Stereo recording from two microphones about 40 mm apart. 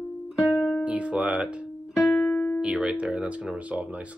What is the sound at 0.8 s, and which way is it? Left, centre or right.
Music, right.